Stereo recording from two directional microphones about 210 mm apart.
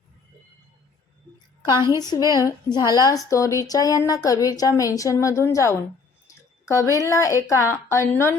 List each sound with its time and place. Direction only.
1.6 s a woman's voice: 20° left (ahead or behind)